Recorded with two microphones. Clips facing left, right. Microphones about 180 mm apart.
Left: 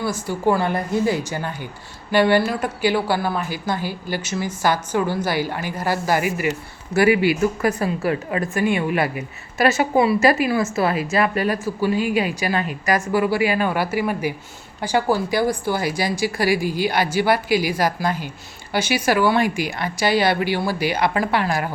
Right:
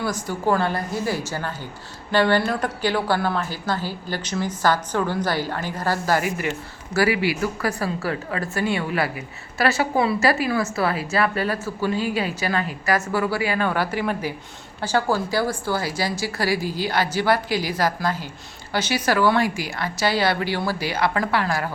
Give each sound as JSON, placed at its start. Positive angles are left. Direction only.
{"t": 0.0, "sound": "a woman's voice", "side_deg": 10}
{"t": 6.9, "sound": "a woman's voice", "side_deg": 20}